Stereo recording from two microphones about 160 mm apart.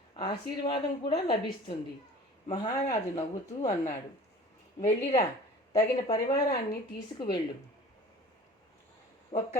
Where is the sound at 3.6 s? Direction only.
50° left (ahead or behind).